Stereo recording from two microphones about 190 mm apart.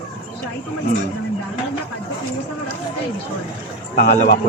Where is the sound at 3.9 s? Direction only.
50° left (ahead or behind).